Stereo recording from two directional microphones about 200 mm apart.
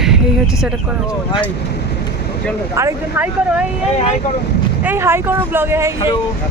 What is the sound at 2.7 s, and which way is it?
Speech, 10° right (ahead or behind).